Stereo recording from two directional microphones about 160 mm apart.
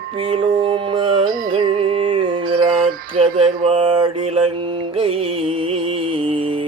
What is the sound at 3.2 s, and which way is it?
Mantra, 35° right (ahead or behind).